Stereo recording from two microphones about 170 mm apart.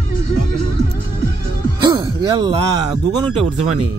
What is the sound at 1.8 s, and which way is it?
Speech, 25° right (ahead or behind).